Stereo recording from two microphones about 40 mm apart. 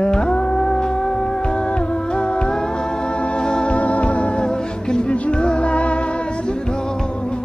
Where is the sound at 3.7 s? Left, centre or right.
Left.